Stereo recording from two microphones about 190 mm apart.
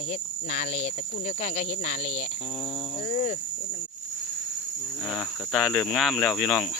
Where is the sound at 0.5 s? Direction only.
40° left (ahead or behind).